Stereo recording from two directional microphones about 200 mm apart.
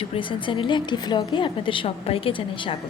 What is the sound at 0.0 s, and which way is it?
A woman's voice, 25° left (ahead or behind).